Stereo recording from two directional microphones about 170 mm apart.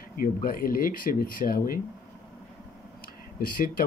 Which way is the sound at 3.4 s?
55° left (ahead or behind).